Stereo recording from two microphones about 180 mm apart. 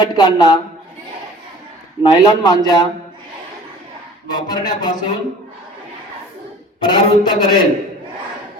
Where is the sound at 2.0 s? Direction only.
25° left (ahead or behind).